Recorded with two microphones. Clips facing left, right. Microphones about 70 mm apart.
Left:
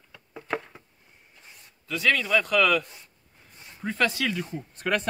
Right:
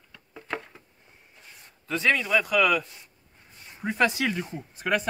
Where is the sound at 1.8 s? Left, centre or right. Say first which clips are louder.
Even; right.